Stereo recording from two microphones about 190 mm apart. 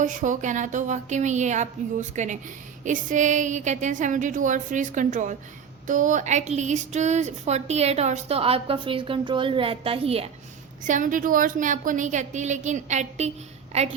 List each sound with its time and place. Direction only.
0.0 s a woman's voice: 40° right (ahead or behind)
10.8 s a woman's voice: 40° right (ahead or behind)